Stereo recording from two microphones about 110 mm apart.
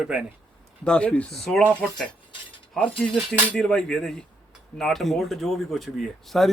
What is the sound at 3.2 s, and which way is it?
Speech, 5° left (ahead or behind).